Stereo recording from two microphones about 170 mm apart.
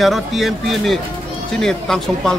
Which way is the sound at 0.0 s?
Centre (ahead or behind).